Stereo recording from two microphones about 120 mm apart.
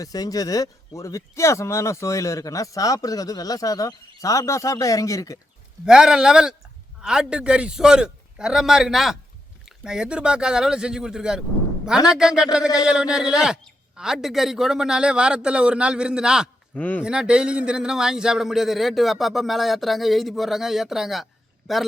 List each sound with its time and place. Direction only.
0.0 s speech: 30° left (ahead or behind)
5.8 s a man's voice: 5° right (ahead or behind)
16.7 s speech: 15° left (ahead or behind)
17.0 s a man's voice: 5° right (ahead or behind)